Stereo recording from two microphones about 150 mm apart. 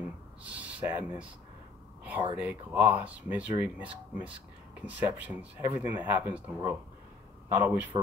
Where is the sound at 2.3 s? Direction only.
10° right (ahead or behind).